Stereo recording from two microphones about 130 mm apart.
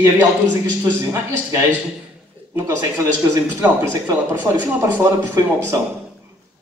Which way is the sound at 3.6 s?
15° right (ahead or behind).